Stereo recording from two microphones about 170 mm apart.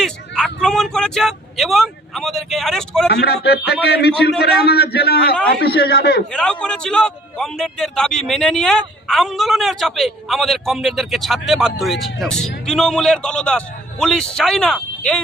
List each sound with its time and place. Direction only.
0.0 s vehicle: 5° left (ahead or behind)
3.1 s a man's voice: 75° left (ahead or behind)
6.3 s a man's voice: 5° left (ahead or behind)